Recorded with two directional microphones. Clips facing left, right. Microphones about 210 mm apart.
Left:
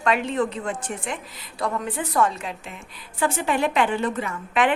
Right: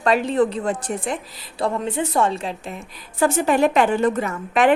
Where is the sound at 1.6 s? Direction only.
25° right (ahead or behind).